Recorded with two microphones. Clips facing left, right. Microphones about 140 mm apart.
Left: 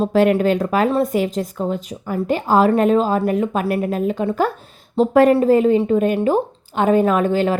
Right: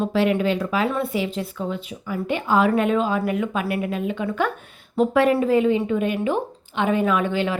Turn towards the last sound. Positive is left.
turn(degrees=40)  # may be behind; listen again after turning